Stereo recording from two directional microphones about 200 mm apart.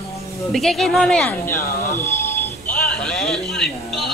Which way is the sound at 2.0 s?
10° left (ahead or behind).